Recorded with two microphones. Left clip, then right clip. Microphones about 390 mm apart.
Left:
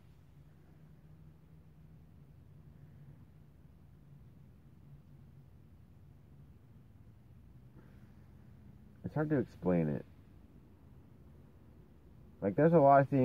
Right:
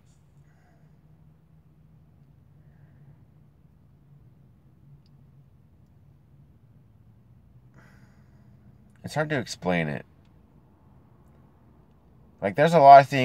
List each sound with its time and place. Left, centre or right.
9.0 s speech: centre
12.4 s speech: centre